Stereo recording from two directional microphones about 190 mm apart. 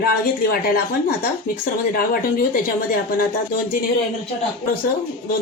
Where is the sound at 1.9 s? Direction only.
50° left (ahead or behind).